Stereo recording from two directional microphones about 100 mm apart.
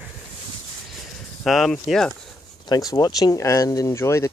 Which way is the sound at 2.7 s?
40° left (ahead or behind).